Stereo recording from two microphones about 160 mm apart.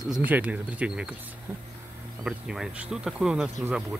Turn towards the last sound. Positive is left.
turn(degrees=-10)  # may be behind; listen again after turning